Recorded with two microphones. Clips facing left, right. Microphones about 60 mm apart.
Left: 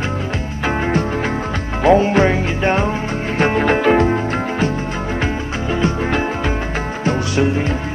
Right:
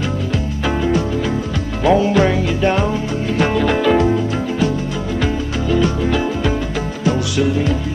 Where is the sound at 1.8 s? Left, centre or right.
Left.